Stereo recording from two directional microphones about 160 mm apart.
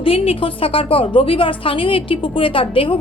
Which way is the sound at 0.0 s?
35° left (ahead or behind).